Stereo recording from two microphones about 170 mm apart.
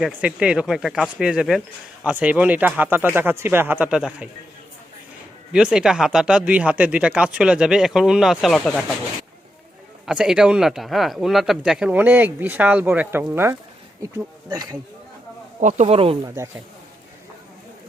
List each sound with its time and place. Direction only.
0.0 s speech: 5° right (ahead or behind)
5.5 s speech: 5° right (ahead or behind)
10.1 s speech: 5° right (ahead or behind); by 14.8 s 25° right (ahead or behind)
15.6 s speech: 40° right (ahead or behind)
16.2 s speech: 15° right (ahead or behind)